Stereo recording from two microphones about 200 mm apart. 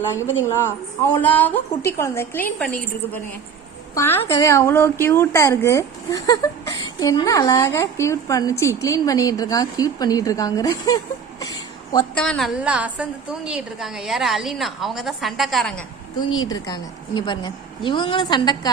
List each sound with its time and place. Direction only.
0.1 s a woman's voice: 10° left (ahead or behind)
12.1 s a woman's voice: 5° left (ahead or behind)
16.5 s a woman's voice: 20° left (ahead or behind)